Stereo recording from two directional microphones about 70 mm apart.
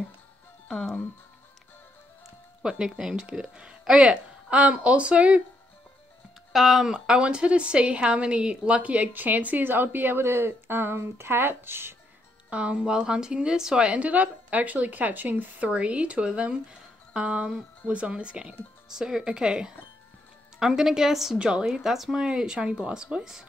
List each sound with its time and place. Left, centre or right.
2.6 s a woman's voice: centre
6.5 s a woman's voice: centre; by 11.9 s right
12.4 s a woman's voice: centre